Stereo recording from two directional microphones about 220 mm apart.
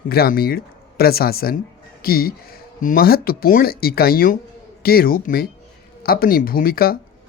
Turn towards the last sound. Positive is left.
turn(degrees=40)  # may be behind; listen again after turning